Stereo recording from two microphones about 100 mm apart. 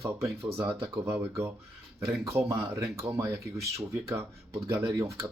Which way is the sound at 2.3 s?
25° right (ahead or behind).